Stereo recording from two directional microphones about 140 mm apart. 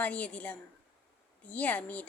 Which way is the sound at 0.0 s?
10° left (ahead or behind).